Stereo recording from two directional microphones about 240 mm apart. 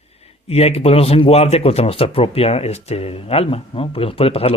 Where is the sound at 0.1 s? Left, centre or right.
Left.